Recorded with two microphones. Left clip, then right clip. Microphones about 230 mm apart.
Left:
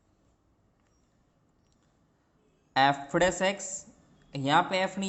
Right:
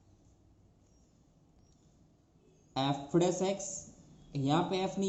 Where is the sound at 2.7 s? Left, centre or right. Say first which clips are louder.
Left 8 dB; left.